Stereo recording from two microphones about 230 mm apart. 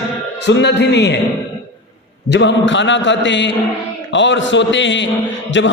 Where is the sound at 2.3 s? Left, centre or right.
Left.